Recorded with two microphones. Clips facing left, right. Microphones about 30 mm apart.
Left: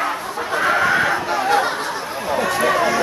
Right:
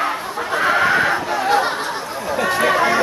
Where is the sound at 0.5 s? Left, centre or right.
Centre.